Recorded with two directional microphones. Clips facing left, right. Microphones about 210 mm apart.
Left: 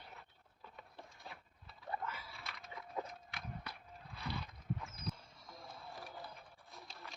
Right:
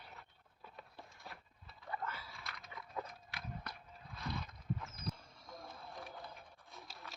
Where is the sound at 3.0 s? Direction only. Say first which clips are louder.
Left 2 dB; 20° left (ahead or behind).